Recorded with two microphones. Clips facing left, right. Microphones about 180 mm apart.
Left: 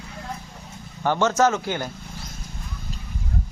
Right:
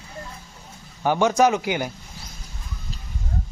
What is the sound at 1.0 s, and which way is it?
Speech, 15° right (ahead or behind).